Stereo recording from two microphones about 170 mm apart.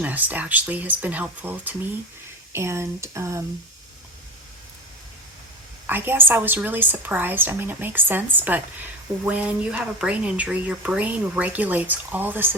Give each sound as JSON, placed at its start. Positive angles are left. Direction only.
{"t": 0.0, "sound": "speech", "side_deg": -10}
{"t": 5.9, "sound": "speech", "side_deg": -10}